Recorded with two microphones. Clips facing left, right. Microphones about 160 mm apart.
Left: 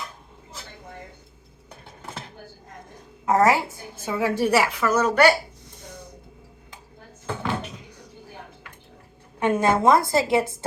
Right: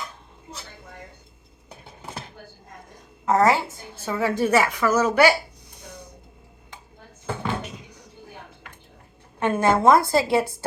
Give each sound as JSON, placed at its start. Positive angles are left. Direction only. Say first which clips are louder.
{"t": 2.0, "sound": "a sound", "louder": "right 1 dB", "side_deg": -10}
{"t": 3.2, "sound": "a woman's voice", "louder": "even", "side_deg": 10}
{"t": 9.4, "sound": "a woman's voice", "louder": "even", "side_deg": 15}